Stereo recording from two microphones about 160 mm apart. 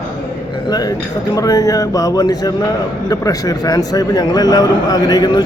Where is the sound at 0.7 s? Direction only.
25° left (ahead or behind).